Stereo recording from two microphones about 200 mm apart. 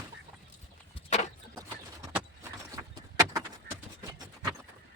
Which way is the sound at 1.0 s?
35° left (ahead or behind).